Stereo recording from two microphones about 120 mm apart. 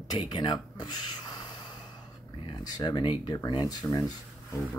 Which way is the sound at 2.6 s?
35° left (ahead or behind).